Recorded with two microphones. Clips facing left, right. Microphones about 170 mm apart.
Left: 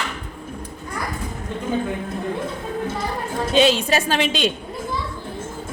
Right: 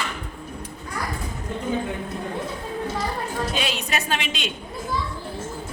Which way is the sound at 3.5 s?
25° left (ahead or behind).